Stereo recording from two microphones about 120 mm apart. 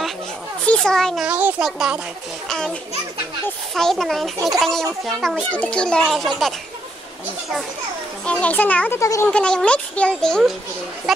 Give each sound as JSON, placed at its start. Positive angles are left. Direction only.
{"t": 0.7, "sound": "a child's voice", "side_deg": 5}
{"t": 1.2, "sound": "a child's voice", "side_deg": -10}
{"t": 2.4, "sound": "a child's voice", "side_deg": 5}
{"t": 8.3, "sound": "a child's voice", "side_deg": 10}
{"t": 9.0, "sound": "speech", "side_deg": 25}
{"t": 9.3, "sound": "a child's voice", "side_deg": 10}